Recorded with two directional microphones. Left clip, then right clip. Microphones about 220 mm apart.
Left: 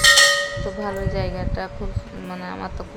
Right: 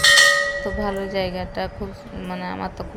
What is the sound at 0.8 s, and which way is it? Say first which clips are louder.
A woman's voice: right 2 dB; 10° right (ahead or behind).